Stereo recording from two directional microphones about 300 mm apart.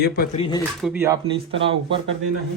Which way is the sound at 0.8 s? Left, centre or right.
Centre.